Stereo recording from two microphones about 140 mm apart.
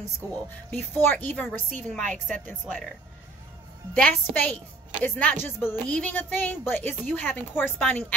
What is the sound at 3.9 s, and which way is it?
Speech, 5° left (ahead or behind).